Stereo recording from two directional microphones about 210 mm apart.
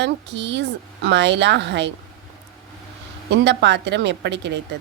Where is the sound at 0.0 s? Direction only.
55° right (ahead or behind).